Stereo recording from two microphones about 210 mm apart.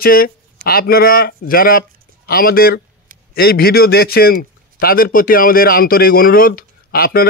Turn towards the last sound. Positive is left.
turn(degrees=45)  # may be behind; listen again after turning